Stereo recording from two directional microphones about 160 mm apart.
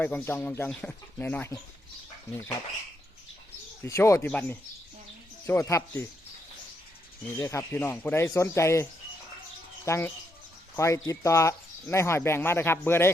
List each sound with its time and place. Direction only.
0.0 s speech: 10° left (ahead or behind)
3.8 s speech: 20° left (ahead or behind)
7.3 s speech: 15° left (ahead or behind)